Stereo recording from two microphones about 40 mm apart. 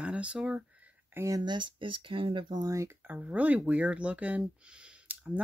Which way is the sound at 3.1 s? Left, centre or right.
Right.